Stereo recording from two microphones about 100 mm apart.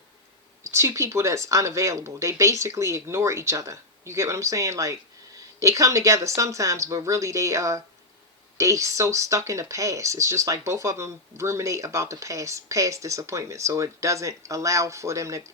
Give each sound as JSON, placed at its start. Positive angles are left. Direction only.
{"t": 0.6, "sound": "speech", "side_deg": -30}